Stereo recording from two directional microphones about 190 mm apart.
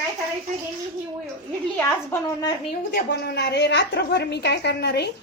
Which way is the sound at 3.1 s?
60° left (ahead or behind).